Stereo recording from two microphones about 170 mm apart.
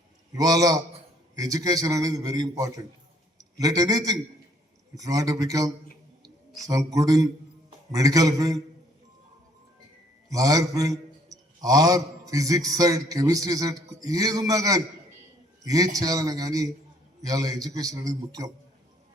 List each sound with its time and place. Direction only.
0.3 s a man's voice: 20° right (ahead or behind)
10.2 s a man's voice: 20° right (ahead or behind)